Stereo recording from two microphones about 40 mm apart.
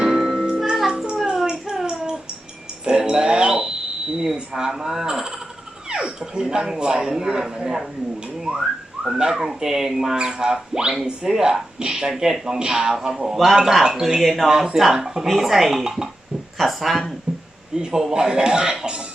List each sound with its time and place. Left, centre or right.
0.0 s music: centre
1.7 s a sound: centre
2.8 s music: centre
4.5 s speech: centre
8.5 s whistling: centre
9.3 s speech: centre
13.8 s speech: centre
14.2 s speech: centre
17.3 s a sound: right
17.7 s speech: centre